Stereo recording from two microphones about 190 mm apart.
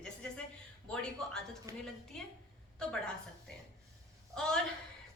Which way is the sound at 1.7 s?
15° right (ahead or behind).